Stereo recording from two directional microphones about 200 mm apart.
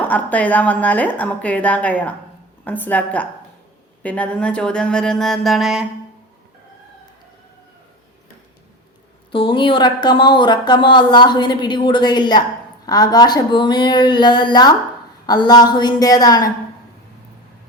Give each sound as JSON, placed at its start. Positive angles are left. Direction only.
{"t": 0.0, "sound": "a woman's voice", "side_deg": 10}
{"t": 9.3, "sound": "speech", "side_deg": 25}